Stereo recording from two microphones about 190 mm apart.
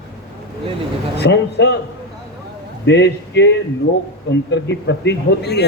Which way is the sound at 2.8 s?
65° left (ahead or behind).